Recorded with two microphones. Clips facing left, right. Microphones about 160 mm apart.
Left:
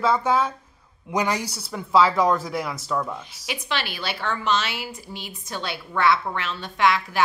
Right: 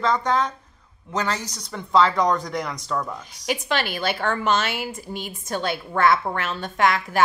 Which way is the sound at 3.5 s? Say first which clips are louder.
Right 5 dB; 45° right (ahead or behind).